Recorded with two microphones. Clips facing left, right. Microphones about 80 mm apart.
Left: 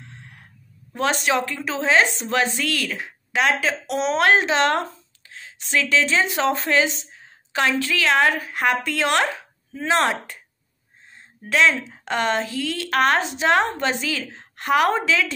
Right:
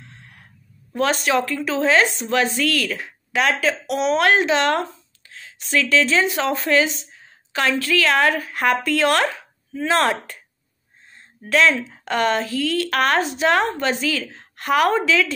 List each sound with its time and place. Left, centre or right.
0.9 s a woman's voice: left
11.4 s a woman's voice: centre